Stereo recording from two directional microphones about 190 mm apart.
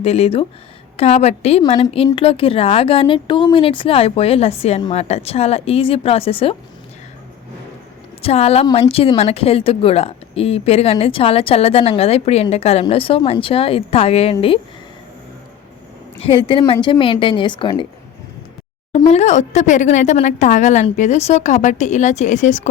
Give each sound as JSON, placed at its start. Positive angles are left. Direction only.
{"t": 0.0, "sound": "speech", "side_deg": 30}
{"t": 8.2, "sound": "speech", "side_deg": 35}
{"t": 16.5, "sound": "speech", "side_deg": 30}
{"t": 18.9, "sound": "speech", "side_deg": 35}